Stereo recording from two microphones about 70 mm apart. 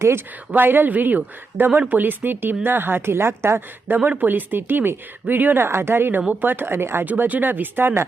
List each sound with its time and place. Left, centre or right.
0.5 s speech: right
3.9 s speech: right
7.1 s speech: right